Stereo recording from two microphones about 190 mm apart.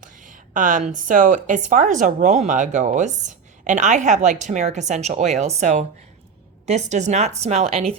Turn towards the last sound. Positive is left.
turn(degrees=-35)  # may be behind; listen again after turning